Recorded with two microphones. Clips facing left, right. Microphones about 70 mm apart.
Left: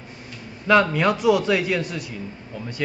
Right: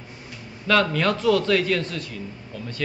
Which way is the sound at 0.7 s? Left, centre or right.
Centre.